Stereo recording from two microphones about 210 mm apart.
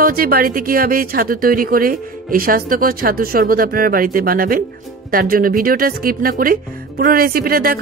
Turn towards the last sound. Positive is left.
turn(degrees=-45)  # may be behind; listen again after turning